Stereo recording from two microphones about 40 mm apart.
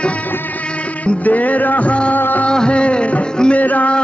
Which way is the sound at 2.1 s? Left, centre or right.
Left.